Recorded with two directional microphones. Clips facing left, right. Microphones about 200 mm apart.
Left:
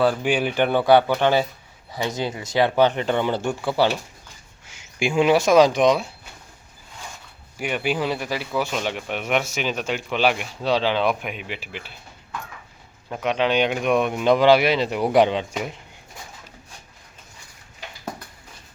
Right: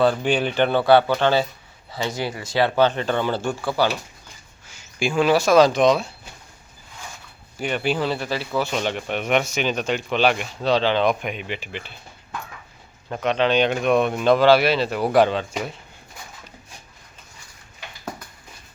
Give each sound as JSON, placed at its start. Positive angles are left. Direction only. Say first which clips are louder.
{"t": 0.0, "sound": "speech", "louder": "right 1 dB", "side_deg": 10}
{"t": 7.6, "sound": "speech", "louder": "right 1 dB", "side_deg": 10}
{"t": 13.1, "sound": "speech", "louder": "right 1 dB", "side_deg": 10}